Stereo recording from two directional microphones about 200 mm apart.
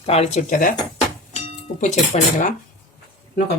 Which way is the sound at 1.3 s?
35° left (ahead or behind).